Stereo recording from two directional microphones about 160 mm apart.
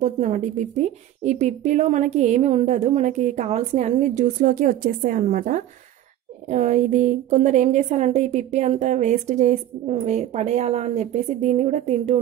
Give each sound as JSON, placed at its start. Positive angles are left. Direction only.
{"t": 0.0, "sound": "a woman's voice", "side_deg": -50}